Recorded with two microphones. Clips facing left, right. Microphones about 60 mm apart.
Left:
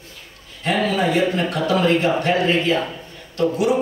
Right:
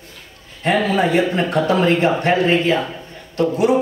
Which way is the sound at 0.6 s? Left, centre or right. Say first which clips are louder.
Right 3 dB; right.